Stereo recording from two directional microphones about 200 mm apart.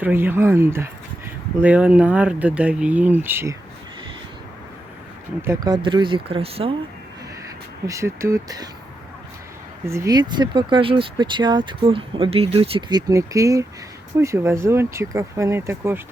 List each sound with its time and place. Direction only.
0.0 s speech: 10° right (ahead or behind)
5.4 s speech: 15° right (ahead or behind)
7.9 s speech: 15° right (ahead or behind)
9.8 s speech: 15° right (ahead or behind)